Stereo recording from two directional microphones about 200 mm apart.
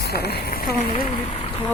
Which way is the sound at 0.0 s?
55° left (ahead or behind).